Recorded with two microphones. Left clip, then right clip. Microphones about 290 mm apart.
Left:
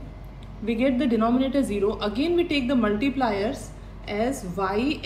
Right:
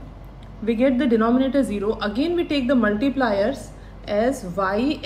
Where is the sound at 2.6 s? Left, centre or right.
Right.